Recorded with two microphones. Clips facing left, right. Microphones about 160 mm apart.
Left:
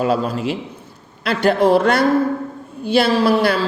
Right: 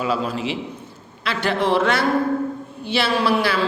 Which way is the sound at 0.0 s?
45° left (ahead or behind).